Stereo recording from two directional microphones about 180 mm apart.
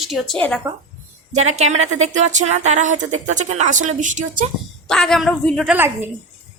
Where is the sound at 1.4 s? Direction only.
35° right (ahead or behind).